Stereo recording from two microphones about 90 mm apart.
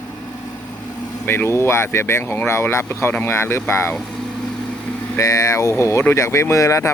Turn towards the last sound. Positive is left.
turn(degrees=35)  # may be behind; listen again after turning